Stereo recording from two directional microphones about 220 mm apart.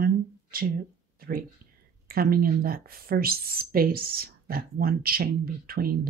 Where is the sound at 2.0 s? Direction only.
40° right (ahead or behind).